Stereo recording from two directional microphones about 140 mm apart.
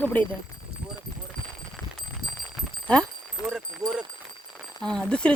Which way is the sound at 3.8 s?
25° right (ahead or behind).